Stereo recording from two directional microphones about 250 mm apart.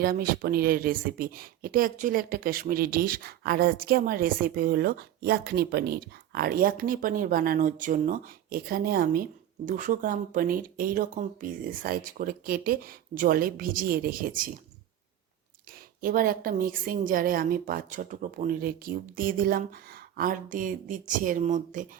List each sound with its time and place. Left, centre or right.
0.0 s speech: right
16.0 s speech: right